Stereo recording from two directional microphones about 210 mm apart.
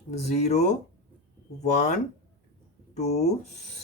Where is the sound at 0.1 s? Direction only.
35° left (ahead or behind).